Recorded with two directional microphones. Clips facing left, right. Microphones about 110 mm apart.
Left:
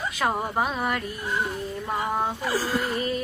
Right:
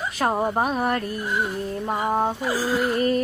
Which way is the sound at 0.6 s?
40° right (ahead or behind).